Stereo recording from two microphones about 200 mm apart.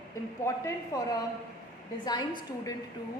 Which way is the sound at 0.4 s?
15° left (ahead or behind).